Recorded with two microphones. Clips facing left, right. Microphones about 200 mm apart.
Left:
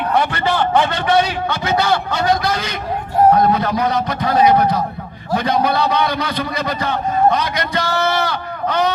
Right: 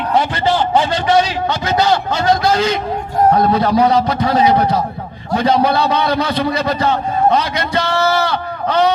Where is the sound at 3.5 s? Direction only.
30° right (ahead or behind).